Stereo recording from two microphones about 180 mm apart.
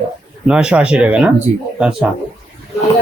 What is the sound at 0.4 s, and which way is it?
Speech, 5° right (ahead or behind).